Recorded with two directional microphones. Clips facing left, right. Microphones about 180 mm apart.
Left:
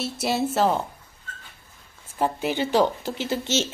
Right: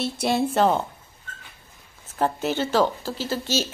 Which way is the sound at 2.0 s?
10° left (ahead or behind).